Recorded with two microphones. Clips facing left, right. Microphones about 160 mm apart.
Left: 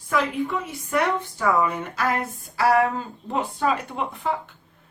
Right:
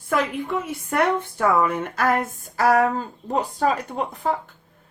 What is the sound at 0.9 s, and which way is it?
Speech, 55° right (ahead or behind).